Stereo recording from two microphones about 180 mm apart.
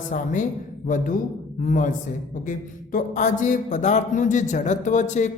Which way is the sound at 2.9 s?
45° left (ahead or behind).